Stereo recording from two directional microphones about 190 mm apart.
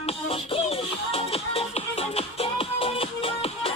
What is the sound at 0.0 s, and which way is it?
Music, 30° left (ahead or behind).